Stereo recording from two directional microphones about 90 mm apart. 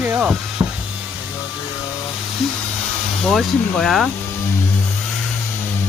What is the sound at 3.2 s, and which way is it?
Speech, 5° left (ahead or behind).